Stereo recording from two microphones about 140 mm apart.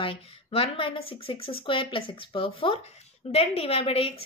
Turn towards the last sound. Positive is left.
turn(degrees=45)  # may be behind; listen again after turning